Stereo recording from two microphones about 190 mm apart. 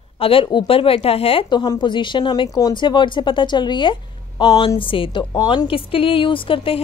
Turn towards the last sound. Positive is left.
turn(degrees=30)  # may be behind; listen again after turning